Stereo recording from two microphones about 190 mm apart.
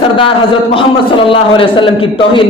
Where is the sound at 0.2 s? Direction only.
30° left (ahead or behind).